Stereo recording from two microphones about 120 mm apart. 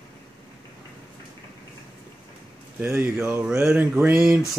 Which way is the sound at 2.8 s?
20° right (ahead or behind).